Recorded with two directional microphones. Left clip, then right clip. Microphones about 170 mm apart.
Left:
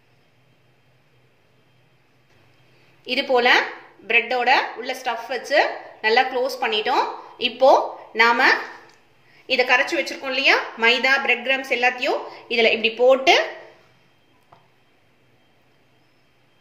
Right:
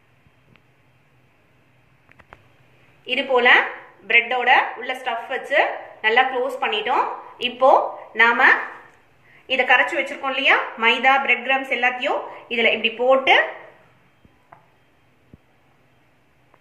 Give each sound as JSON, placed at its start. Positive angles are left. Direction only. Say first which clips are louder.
{"t": 3.1, "sound": "a woman's voice", "louder": "right 2 dB", "side_deg": 90}